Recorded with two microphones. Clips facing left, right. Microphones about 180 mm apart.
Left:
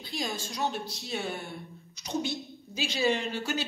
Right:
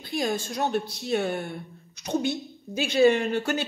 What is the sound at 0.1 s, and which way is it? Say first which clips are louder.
Speech: right 7 dB; 55° right (ahead or behind).